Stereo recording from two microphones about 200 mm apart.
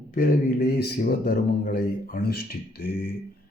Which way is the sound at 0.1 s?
45° left (ahead or behind).